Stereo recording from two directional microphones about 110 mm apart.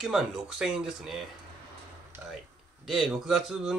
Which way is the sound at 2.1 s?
20° right (ahead or behind).